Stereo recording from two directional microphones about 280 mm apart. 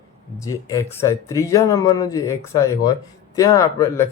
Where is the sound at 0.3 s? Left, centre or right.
Centre.